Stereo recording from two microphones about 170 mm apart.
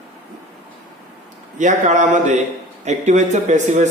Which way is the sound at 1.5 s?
45° right (ahead or behind).